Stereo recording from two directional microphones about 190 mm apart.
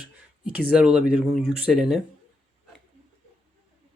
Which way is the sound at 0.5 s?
5° right (ahead or behind).